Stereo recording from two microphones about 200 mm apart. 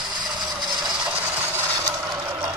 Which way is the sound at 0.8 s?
10° right (ahead or behind).